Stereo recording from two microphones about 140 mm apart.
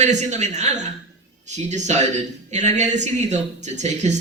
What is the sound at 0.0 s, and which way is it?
A man's voice, 55° right (ahead or behind).